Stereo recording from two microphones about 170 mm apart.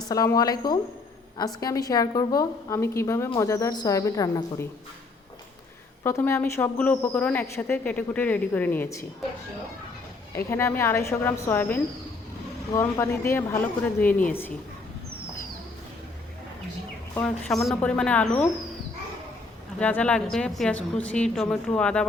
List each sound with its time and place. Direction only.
0.1 s a woman's voice: 20° left (ahead or behind)
6.0 s speech: 15° left (ahead or behind)
10.3 s speech: 15° left (ahead or behind)
17.2 s speech: 5° left (ahead or behind)
19.8 s speech: 10° left (ahead or behind)